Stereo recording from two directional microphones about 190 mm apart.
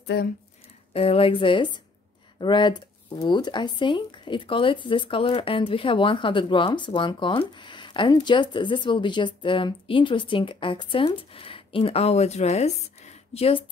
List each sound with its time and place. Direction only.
0.0 s speech: 60° left (ahead or behind)
0.9 s speech: 30° left (ahead or behind)